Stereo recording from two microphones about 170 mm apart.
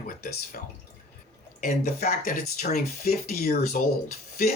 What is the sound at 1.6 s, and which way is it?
Speech, 50° left (ahead or behind).